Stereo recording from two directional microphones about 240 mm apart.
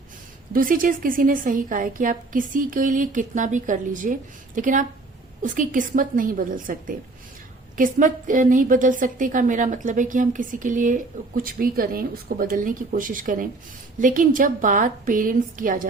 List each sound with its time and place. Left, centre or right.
0.5 s a woman's voice: right